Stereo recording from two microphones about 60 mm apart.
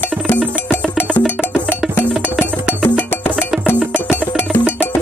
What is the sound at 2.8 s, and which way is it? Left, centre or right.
Music, left.